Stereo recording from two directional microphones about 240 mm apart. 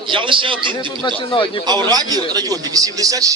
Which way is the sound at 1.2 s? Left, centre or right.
Left.